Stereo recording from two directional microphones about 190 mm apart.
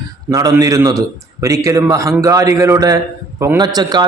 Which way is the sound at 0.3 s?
20° right (ahead or behind).